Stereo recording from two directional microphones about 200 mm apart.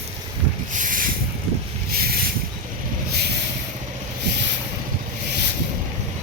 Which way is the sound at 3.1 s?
55° right (ahead or behind).